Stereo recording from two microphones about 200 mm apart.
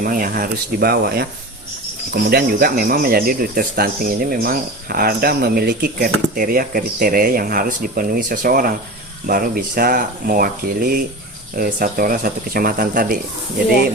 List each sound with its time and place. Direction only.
0.0 s speech: 45° right (ahead or behind)
2.3 s speech: 45° right (ahead or behind)